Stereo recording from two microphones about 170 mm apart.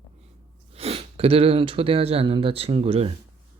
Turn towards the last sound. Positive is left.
turn(degrees=-35)  # may be behind; listen again after turning